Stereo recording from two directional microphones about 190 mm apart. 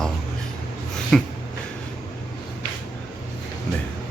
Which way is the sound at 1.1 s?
Centre (ahead or behind).